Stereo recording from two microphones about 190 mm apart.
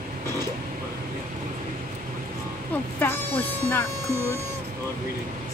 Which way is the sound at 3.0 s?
10° left (ahead or behind).